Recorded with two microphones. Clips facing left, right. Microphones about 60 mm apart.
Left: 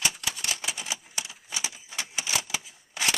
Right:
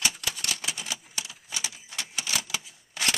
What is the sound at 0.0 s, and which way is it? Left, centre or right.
Typewriter, centre.